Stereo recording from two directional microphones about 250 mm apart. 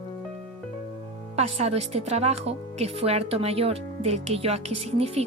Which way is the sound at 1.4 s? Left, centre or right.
Right.